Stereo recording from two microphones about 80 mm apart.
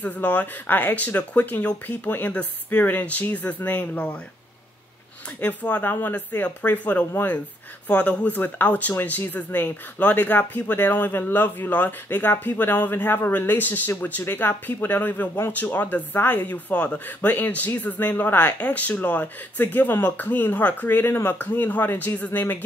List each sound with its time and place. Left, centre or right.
0.0 s speech: centre
5.4 s speech: centre